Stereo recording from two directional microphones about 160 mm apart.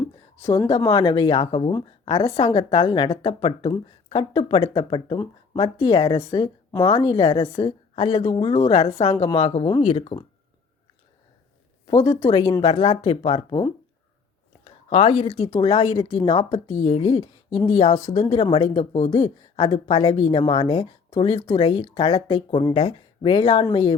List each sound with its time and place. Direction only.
0.4 s speech: 15° left (ahead or behind)
0.9 s speech: 30° left (ahead or behind)
6.2 s speech: 25° left (ahead or behind)
12.0 s speech: 15° left (ahead or behind)
12.6 s speech: 35° left (ahead or behind)